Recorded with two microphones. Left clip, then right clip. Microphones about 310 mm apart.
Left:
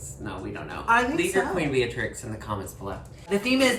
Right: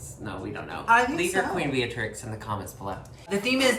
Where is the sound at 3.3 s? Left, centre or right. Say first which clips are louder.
Left 1 dB; centre.